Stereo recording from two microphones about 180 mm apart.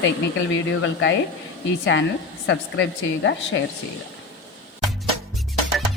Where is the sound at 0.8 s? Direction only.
90° left.